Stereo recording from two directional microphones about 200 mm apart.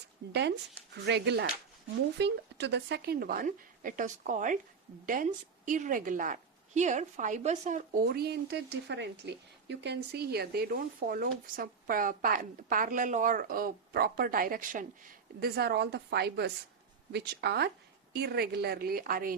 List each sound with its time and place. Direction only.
0.3 s a woman's voice: 60° right (ahead or behind); by 8.0 s 35° right (ahead or behind)
8.0 s speech: 55° right (ahead or behind)